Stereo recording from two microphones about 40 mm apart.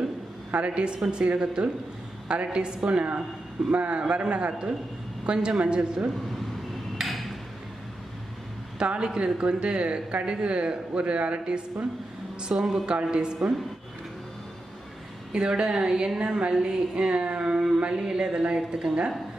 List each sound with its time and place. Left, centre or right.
0.6 s a woman's voice: right
1.3 s a woman's voice: right
4.2 s a woman's voice: right
7.0 s a sound: centre
8.7 s a woman's voice: right
12.8 s a woman's voice: right
15.3 s a woman's voice: centre
16.5 s speech: centre
17.1 s a woman's voice: right